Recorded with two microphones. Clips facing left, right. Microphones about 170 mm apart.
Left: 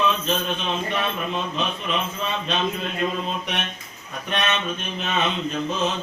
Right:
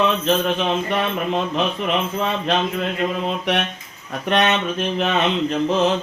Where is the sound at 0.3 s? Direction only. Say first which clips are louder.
Right 6 dB; 75° right (ahead or behind).